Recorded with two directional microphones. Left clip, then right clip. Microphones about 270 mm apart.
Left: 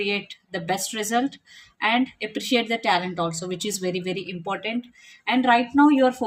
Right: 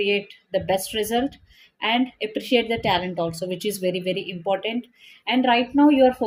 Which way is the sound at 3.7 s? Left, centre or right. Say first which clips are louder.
Right 3 dB; centre.